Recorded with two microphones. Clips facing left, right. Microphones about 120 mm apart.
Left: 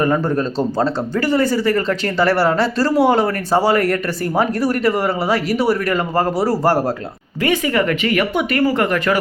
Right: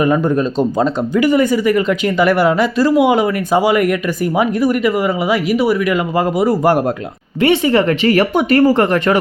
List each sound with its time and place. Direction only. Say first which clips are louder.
0.0 s speech: right 3 dB; 15° right (ahead or behind)
7.4 s speech: right 5 dB; 25° right (ahead or behind)